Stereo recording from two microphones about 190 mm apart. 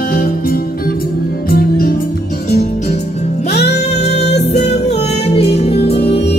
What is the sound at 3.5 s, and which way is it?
Music, 60° left (ahead or behind).